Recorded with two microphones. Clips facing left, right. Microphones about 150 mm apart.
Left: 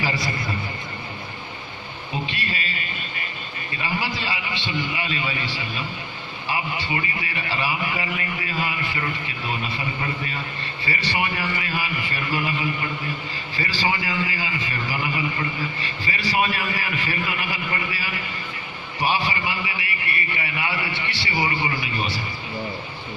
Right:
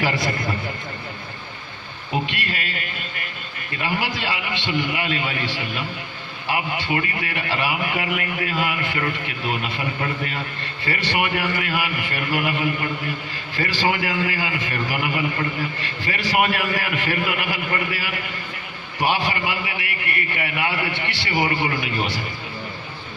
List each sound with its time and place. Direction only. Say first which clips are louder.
0.0 s speech: right 3 dB; 55° right (ahead or behind)
2.2 s a man's voice: right 1 dB; 55° right (ahead or behind)